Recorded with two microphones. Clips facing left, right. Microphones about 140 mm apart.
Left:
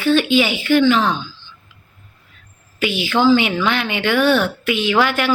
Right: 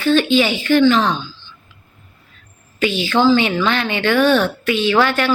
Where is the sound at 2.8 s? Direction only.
10° left (ahead or behind).